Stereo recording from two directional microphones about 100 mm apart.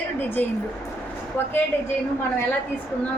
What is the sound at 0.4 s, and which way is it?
A woman's voice, 15° left (ahead or behind).